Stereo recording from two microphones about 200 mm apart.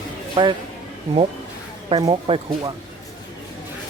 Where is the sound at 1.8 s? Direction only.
25° right (ahead or behind).